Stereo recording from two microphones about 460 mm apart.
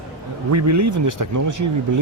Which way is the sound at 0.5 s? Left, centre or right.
Right.